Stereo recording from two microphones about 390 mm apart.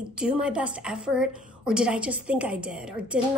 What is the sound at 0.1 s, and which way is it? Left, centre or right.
A woman's voice, centre.